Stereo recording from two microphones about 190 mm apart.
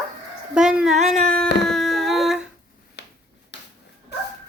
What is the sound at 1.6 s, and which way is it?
Humming, centre (ahead or behind).